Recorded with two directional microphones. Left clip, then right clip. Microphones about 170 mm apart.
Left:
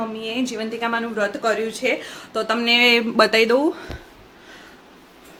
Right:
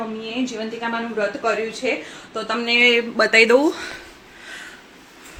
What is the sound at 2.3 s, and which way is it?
Speech, 25° left (ahead or behind).